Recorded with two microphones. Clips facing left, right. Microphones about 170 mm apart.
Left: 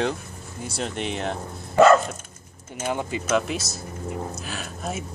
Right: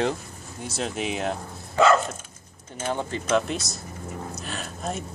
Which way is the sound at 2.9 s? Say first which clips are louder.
Even; 10° left (ahead or behind).